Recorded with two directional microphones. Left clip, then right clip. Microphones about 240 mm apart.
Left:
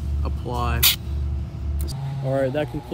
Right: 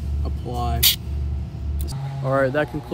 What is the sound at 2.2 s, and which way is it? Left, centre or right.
Speech, centre.